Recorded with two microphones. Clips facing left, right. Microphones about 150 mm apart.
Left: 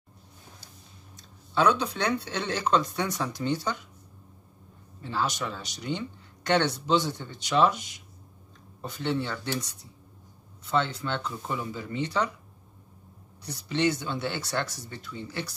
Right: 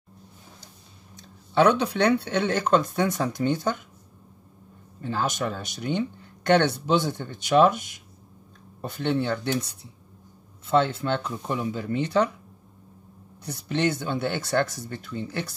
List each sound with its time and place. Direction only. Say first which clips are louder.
1.5 s speech: right 4 dB; 60° right (ahead or behind)
5.0 s speech: right 3 dB; 50° right (ahead or behind)
11.0 s speech: right 5 dB; 55° right (ahead or behind)
13.4 s speech: right 2 dB; 55° right (ahead or behind)